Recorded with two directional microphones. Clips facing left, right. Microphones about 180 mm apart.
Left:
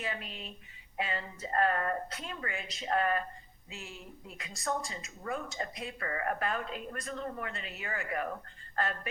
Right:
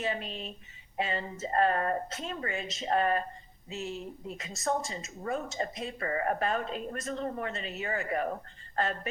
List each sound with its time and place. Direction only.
0.0 s a woman's voice: 30° right (ahead or behind)